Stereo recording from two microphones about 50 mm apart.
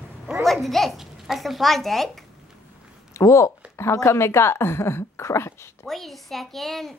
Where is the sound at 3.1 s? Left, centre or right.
Left.